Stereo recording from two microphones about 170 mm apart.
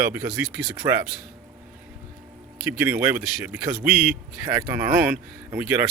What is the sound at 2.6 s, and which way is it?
Speech, 10° right (ahead or behind).